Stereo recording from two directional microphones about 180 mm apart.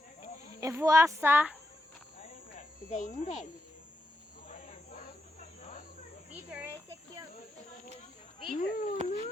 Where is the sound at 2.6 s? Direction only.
45° left (ahead or behind).